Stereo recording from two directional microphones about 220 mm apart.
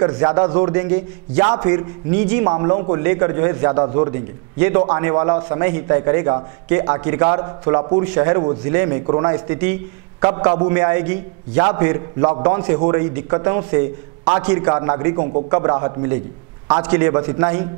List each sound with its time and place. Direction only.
0.0 s a man's voice: 20° right (ahead or behind)
8.0 s a man's voice: 10° right (ahead or behind)